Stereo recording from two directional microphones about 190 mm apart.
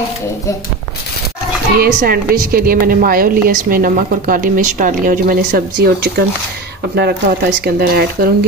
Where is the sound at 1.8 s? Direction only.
55° right (ahead or behind).